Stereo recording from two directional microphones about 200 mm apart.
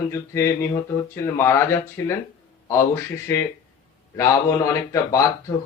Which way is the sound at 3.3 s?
15° left (ahead or behind).